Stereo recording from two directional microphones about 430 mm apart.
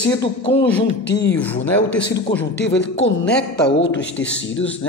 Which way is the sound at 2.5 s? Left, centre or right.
Centre.